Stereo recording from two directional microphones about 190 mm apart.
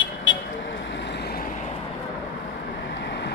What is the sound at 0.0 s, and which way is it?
Vehicle, 75° left (ahead or behind).